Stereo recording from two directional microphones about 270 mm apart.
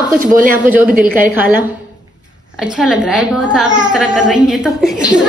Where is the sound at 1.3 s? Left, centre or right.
Centre.